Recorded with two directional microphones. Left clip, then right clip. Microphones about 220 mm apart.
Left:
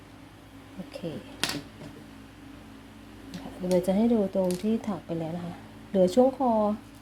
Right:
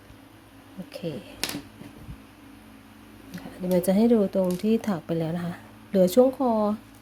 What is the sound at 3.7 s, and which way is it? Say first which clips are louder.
Speech: right 3 dB; 15° right (ahead or behind).